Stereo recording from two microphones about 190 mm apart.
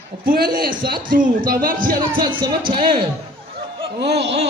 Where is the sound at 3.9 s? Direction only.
65° right (ahead or behind).